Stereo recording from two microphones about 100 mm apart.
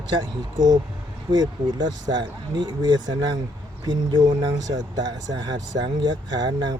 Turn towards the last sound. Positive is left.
turn(degrees=-45)  # may be behind; listen again after turning